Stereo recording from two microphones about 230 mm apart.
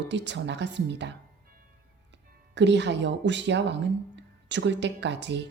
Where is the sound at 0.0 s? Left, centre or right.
Right.